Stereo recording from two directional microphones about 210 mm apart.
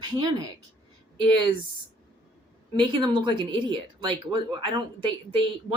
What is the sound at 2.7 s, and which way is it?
Speech, 20° right (ahead or behind).